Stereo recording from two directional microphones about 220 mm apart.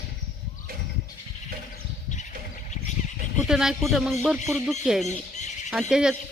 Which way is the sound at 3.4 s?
Centre (ahead or behind).